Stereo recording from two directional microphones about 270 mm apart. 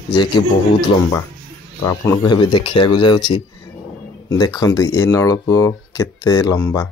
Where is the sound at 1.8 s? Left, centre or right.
Centre.